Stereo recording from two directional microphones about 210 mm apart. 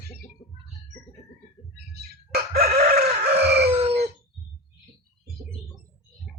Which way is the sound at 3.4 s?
50° right (ahead or behind).